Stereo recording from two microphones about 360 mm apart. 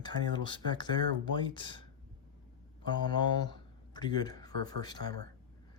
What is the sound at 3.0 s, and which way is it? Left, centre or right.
Speech, centre.